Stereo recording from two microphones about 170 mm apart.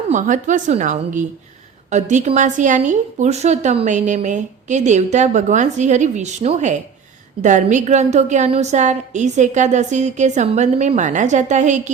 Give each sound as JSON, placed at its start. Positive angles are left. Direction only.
{"t": 0.1, "sound": "a woman's voice", "side_deg": -45}